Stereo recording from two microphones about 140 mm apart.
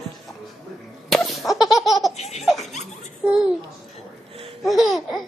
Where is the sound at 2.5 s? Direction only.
Centre (ahead or behind).